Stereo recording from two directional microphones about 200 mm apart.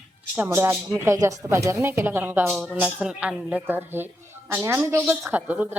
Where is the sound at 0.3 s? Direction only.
10° right (ahead or behind).